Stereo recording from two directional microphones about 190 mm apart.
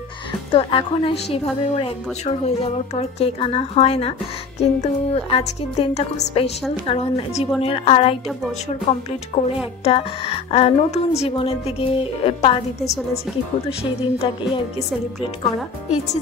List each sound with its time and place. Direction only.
0.5 s a woman's voice: 30° left (ahead or behind)
13.7 s a woman's voice: 30° left (ahead or behind)